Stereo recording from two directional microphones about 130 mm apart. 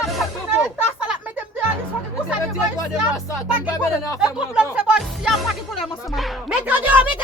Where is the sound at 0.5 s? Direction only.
10° right (ahead or behind).